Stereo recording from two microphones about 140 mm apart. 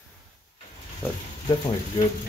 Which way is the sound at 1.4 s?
35° left (ahead or behind).